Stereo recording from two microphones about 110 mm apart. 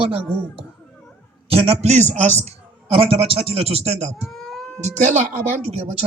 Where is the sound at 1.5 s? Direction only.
60° right (ahead or behind).